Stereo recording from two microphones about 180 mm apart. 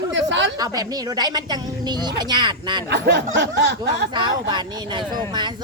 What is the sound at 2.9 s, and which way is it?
A woman's voice, 75° right (ahead or behind).